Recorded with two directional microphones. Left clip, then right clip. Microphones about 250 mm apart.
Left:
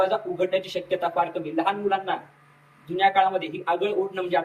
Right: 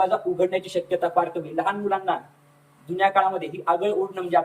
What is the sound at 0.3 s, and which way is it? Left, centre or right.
A man's voice, centre.